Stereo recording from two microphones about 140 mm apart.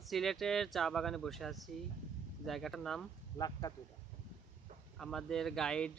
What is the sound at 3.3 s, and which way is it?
Speech, 30° left (ahead or behind).